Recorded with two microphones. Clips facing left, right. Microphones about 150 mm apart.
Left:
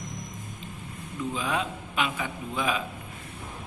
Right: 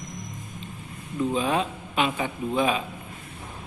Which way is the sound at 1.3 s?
30° right (ahead or behind).